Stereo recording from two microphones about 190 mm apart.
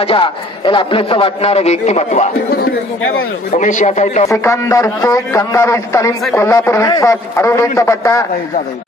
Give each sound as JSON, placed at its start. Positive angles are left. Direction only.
{"t": 0.0, "sound": "a man's voice", "side_deg": 25}
{"t": 3.5, "sound": "a man's voice", "side_deg": 40}
{"t": 4.3, "sound": "a man's voice", "side_deg": 15}